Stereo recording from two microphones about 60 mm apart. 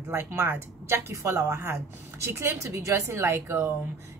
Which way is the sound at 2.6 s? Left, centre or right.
Right.